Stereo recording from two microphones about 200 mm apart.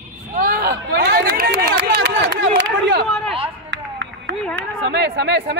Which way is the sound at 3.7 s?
65° right (ahead or behind).